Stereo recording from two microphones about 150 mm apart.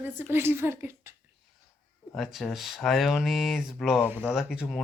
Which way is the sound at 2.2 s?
Centre (ahead or behind).